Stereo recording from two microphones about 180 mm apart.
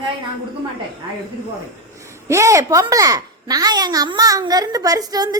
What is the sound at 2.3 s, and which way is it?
A woman's voice, 15° right (ahead or behind).